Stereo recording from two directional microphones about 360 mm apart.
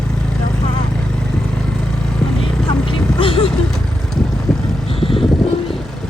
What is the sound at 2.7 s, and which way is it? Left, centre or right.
Vehicle, centre.